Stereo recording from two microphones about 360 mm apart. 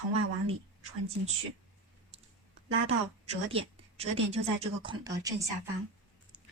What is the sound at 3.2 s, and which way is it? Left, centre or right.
Speech, centre.